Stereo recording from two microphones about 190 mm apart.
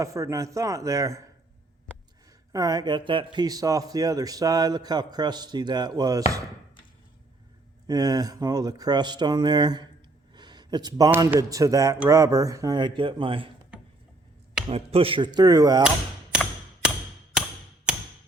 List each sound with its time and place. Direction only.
0.0 s speech: 15° right (ahead or behind)
2.5 s a man's voice: 20° right (ahead or behind)
7.9 s a man's voice: 20° right (ahead or behind)
10.3 s a sound: 20° right (ahead or behind)
11.3 s a man's voice: 15° right (ahead or behind)
14.7 s a man's voice: 30° right (ahead or behind)
17.9 s a sound: 5° right (ahead or behind)